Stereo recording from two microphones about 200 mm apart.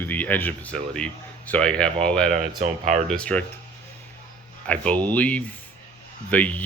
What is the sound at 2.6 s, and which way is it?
Speech, 40° right (ahead or behind).